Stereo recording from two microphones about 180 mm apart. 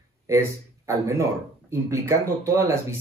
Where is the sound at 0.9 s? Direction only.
15° right (ahead or behind).